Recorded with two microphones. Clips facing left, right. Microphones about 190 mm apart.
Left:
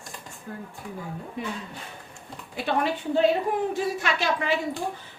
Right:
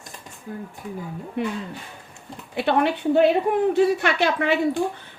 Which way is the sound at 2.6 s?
65° right (ahead or behind).